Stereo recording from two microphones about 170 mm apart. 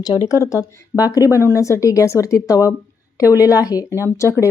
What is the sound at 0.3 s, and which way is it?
Speech, 15° left (ahead or behind).